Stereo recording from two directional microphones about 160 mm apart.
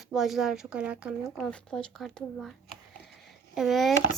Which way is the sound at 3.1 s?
Centre (ahead or behind).